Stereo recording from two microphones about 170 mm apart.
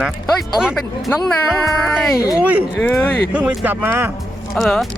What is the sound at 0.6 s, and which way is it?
Speech, 5° right (ahead or behind).